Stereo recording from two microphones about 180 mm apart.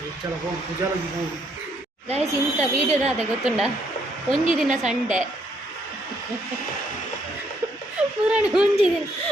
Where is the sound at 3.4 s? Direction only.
5° right (ahead or behind).